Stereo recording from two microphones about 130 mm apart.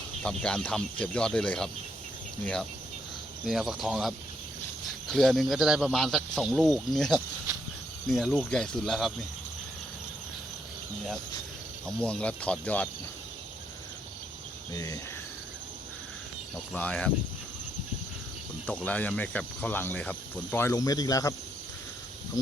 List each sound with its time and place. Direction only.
0.2 s cricket: 5° left (ahead or behind)
3.4 s speech: 5° right (ahead or behind)
11.9 s cricket: 10° left (ahead or behind)
14.7 s cricket: 30° left (ahead or behind)
16.7 s cricket: 10° left (ahead or behind)
18.6 s cricket: 10° left (ahead or behind); by 21.3 s 25° left (ahead or behind)